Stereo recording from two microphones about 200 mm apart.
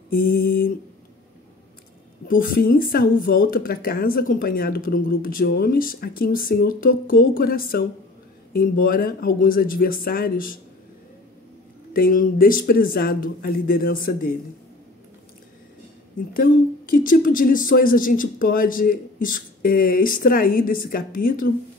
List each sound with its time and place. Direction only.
0.1 s speech: 45° left (ahead or behind)
2.2 s speech: 45° left (ahead or behind)
11.9 s speech: 45° left (ahead or behind)
16.3 s speech: 45° left (ahead or behind)